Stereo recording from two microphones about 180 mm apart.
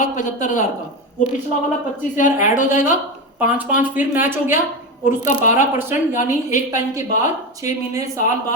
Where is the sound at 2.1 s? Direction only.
45° left (ahead or behind).